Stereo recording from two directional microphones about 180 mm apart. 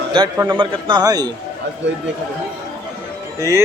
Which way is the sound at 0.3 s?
25° right (ahead or behind).